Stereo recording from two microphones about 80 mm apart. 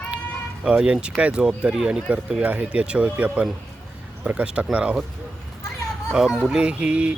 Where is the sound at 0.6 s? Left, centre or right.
Centre.